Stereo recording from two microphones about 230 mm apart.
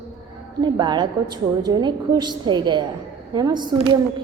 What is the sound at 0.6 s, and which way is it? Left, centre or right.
A woman's voice, centre.